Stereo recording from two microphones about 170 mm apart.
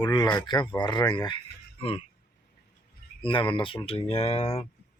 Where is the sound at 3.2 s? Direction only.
30° left (ahead or behind).